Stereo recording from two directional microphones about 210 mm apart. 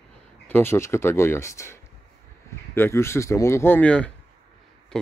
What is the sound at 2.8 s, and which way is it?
Speech, 10° left (ahead or behind).